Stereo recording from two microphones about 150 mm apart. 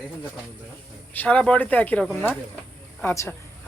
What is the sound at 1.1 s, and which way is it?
A woman's voice, 10° left (ahead or behind).